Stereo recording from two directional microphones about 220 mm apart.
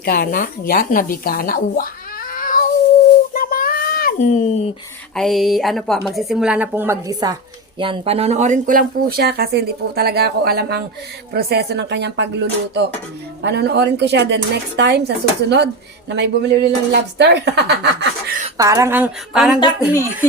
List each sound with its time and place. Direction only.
0.0 s speech: 45° left (ahead or behind)
2.3 s cat: 40° left (ahead or behind)
3.3 s child singing: 40° left (ahead or behind)
5.1 s a woman's voice: centre (ahead or behind); by 18.3 s 50° right (ahead or behind)
18.5 s speech: 15° right (ahead or behind)